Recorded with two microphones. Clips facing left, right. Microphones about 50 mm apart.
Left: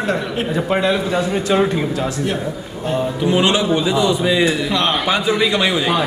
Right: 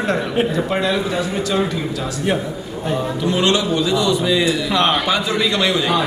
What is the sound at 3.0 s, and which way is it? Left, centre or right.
A man's voice, centre.